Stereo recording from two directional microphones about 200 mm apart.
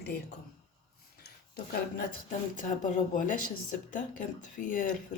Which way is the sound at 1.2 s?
50° left (ahead or behind).